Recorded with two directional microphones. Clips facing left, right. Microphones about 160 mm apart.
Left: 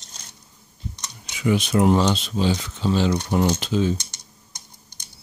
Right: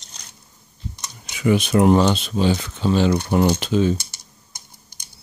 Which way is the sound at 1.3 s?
55° right (ahead or behind).